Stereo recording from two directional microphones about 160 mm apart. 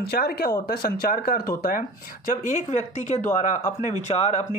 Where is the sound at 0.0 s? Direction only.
75° left (ahead or behind); by 4.5 s 45° left (ahead or behind).